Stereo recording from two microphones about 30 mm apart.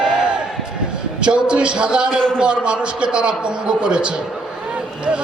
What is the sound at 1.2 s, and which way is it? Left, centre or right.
A man's voice, right.